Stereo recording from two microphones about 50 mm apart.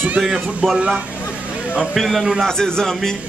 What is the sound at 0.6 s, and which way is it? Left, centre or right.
Speech, centre.